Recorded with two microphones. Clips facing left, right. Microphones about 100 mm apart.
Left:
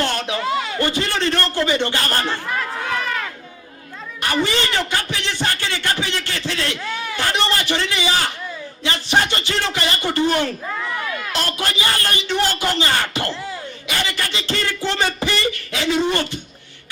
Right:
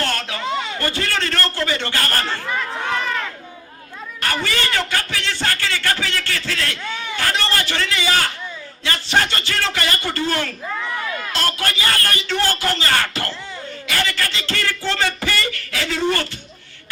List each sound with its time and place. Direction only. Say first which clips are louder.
0.0 s a sound: left 2 dB; 20° left (ahead or behind)
0.4 s a sound: right 1 dB; 5° left (ahead or behind)
0.8 s a man's voice: left 2 dB; 20° left (ahead or behind)
2.5 s run: even; centre (ahead or behind)
4.2 s a man's voice: left 3 dB; 20° left (ahead or behind)
6.8 s speech: left 1 dB; 5° left (ahead or behind)
7.2 s a man's voice: left 1 dB; 20° left (ahead or behind)
10.7 s speech: even; centre (ahead or behind)
11.3 s a man's voice: right 1 dB; 20° left (ahead or behind)